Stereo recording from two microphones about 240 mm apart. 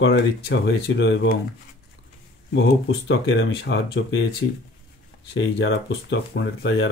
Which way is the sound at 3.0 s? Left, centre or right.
Left.